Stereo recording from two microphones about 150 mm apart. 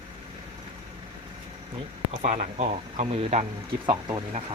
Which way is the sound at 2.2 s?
55° right (ahead or behind).